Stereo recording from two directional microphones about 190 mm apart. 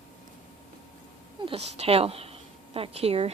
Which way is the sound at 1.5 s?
35° right (ahead or behind).